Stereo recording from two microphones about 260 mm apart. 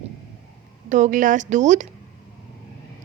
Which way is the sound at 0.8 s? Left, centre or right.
Right.